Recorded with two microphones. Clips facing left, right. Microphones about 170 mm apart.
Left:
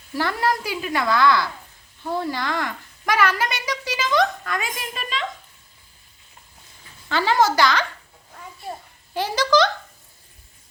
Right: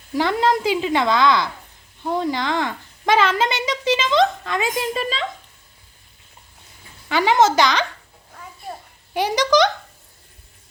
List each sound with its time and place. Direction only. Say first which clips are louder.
0.1 s a woman's voice: right 4 dB; 20° right (ahead or behind)
7.1 s a woman's voice: right 3 dB; 15° right (ahead or behind)
9.1 s a child's voice: right 2 dB; 15° right (ahead or behind)